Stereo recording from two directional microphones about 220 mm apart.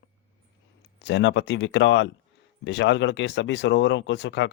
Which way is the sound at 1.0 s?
55° left (ahead or behind).